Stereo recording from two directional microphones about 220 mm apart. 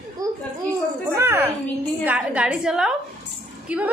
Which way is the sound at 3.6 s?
5° right (ahead or behind).